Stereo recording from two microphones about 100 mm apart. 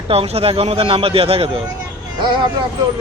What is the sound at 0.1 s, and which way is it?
Speech, 75° right (ahead or behind).